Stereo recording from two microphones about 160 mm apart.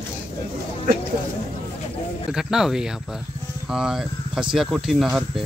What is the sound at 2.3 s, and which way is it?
Speech, 5° right (ahead or behind).